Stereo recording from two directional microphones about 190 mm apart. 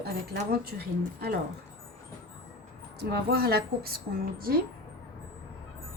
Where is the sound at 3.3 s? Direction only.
55° right (ahead or behind).